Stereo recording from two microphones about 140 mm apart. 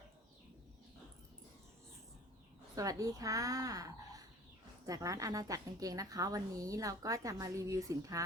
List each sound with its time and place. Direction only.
2.7 s a woman's voice: 25° right (ahead or behind)